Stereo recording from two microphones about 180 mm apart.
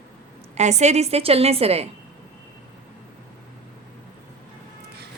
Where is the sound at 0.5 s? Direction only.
40° right (ahead or behind).